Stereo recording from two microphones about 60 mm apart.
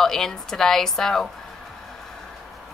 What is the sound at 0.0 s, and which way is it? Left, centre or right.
A woman's voice, centre.